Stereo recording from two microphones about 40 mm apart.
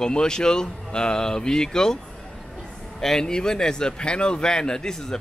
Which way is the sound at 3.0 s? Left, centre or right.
Centre.